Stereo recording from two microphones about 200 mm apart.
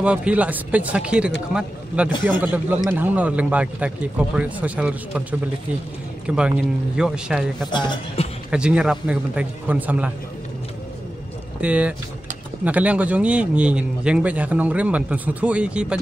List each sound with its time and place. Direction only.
0.0 s a man's voice: 5° right (ahead or behind)
6.2 s a man's voice: 5° right (ahead or behind)
7.7 s speech: 20° left (ahead or behind)
8.5 s a man's voice: 5° right (ahead or behind)
11.6 s a man's voice: 5° right (ahead or behind)